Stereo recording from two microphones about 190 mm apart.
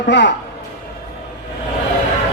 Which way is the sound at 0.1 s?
70° left (ahead or behind).